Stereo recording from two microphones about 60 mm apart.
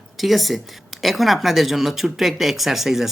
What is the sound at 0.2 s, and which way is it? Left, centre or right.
Speech, centre.